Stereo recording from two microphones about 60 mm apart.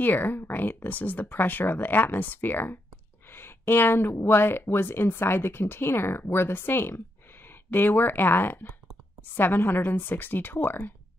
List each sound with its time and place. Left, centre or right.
0.0 s speech: left